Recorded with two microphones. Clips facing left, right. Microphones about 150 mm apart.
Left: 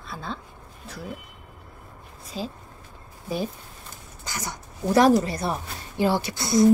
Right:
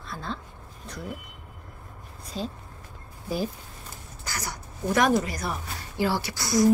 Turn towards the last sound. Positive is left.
turn(degrees=25)  # may be behind; listen again after turning